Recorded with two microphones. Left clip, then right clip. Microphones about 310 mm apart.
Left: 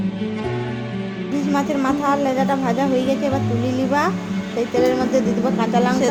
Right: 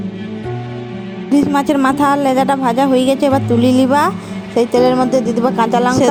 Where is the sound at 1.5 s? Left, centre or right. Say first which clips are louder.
Right 7 dB; right.